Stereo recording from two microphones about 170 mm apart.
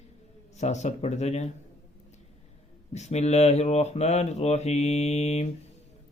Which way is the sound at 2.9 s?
40° left (ahead or behind).